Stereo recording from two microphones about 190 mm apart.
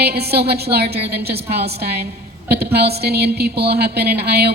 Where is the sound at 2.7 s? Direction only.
60° right (ahead or behind).